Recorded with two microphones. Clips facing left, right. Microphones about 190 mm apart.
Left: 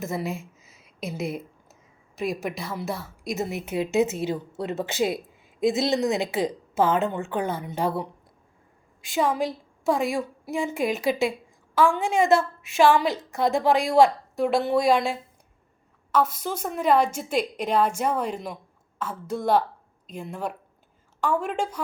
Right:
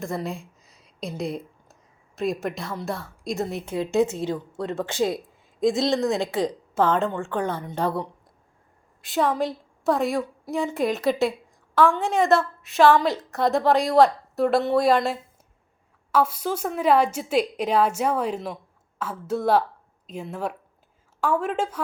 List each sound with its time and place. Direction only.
0.0 s a sound: 5° left (ahead or behind)
2.1 s a woman's voice: centre (ahead or behind)
6.0 s speech: 15° left (ahead or behind)
6.2 s a woman's voice: 5° left (ahead or behind)
7.1 s a woman's voice: 15° left (ahead or behind)
9.1 s a woman's voice: centre (ahead or behind)
21.4 s a woman's voice: 5° right (ahead or behind)